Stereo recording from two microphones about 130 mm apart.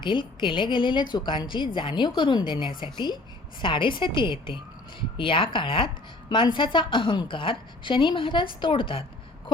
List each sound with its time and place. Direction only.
0.0 s a woman's voice: 40° left (ahead or behind)